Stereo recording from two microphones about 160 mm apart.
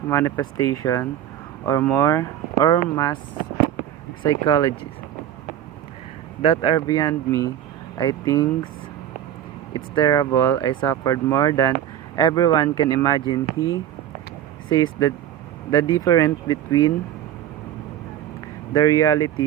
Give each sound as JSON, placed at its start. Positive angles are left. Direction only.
{"t": 0.1, "sound": "speech", "side_deg": 20}
{"t": 4.2, "sound": "speech", "side_deg": 25}
{"t": 6.4, "sound": "speech", "side_deg": 35}
{"t": 9.7, "sound": "speech", "side_deg": 25}
{"t": 14.7, "sound": "speech", "side_deg": 20}
{"t": 18.7, "sound": "speech", "side_deg": 20}